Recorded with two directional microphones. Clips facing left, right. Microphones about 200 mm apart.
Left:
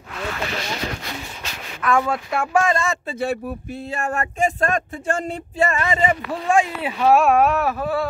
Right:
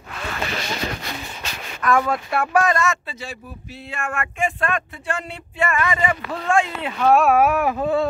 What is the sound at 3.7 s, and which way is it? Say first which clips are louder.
Speech: left 2 dB; 40° left (ahead or behind).